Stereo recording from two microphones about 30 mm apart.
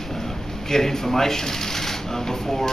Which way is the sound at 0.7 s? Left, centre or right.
Centre.